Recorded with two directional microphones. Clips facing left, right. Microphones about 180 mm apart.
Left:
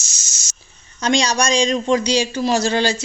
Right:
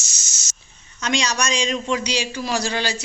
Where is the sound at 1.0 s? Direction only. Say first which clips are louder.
Left 5 dB; 35° left (ahead or behind).